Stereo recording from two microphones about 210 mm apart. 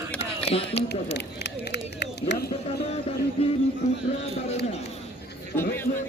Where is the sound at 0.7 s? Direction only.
50° left (ahead or behind).